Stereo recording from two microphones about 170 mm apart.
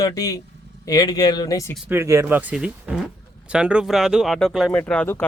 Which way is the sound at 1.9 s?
15° right (ahead or behind).